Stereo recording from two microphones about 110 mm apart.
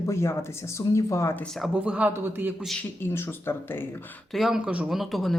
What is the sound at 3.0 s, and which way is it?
Speech, 20° left (ahead or behind).